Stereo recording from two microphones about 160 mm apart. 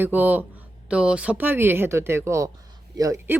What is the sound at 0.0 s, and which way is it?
Speech, 10° right (ahead or behind).